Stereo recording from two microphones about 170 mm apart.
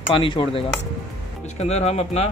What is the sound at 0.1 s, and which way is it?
Speech, 30° left (ahead or behind).